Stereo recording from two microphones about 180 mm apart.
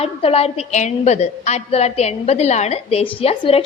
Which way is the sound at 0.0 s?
35° left (ahead or behind).